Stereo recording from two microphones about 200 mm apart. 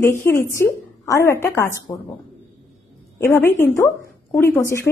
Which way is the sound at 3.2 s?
10° left (ahead or behind).